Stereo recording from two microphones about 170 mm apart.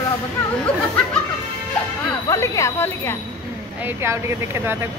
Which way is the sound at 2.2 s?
20° left (ahead or behind).